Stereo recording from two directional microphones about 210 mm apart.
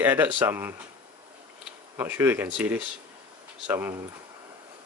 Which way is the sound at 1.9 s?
10° right (ahead or behind).